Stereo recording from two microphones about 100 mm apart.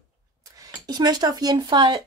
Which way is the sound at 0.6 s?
45° right (ahead or behind).